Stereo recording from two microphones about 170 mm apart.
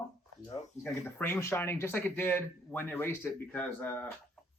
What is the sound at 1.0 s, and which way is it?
Speech, 15° left (ahead or behind).